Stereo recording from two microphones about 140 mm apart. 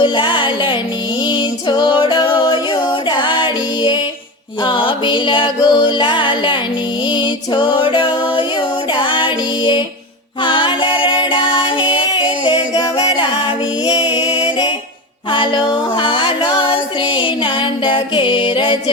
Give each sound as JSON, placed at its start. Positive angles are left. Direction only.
{"t": 0.0, "sound": "music", "side_deg": 35}